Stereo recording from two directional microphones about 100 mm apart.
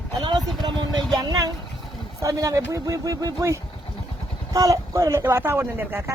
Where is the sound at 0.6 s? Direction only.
45° right (ahead or behind).